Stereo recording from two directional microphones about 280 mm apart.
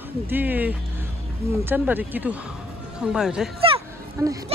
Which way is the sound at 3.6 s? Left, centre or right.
Centre.